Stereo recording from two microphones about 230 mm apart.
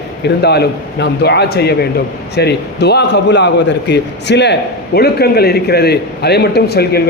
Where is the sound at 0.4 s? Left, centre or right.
Left.